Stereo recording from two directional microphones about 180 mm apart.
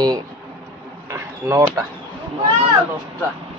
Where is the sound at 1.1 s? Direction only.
20° right (ahead or behind).